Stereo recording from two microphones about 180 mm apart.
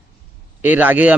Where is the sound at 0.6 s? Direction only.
10° right (ahead or behind).